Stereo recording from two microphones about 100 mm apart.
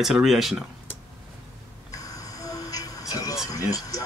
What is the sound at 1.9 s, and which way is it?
Train, 35° left (ahead or behind).